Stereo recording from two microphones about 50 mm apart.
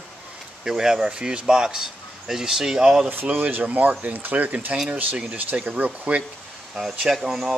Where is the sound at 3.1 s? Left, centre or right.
Right.